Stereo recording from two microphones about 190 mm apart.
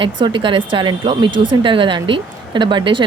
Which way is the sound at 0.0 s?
25° right (ahead or behind).